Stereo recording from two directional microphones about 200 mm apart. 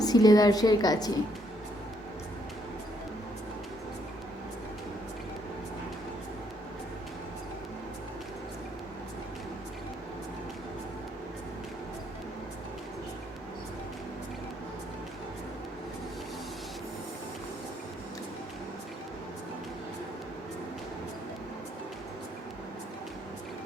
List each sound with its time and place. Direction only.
0.0 s a woman's voice: 20° left (ahead or behind)